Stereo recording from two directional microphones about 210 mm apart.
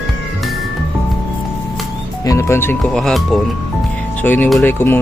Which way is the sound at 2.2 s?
15° left (ahead or behind).